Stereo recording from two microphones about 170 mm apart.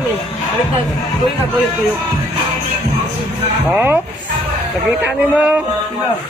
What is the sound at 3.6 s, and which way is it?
Speech, 10° right (ahead or behind).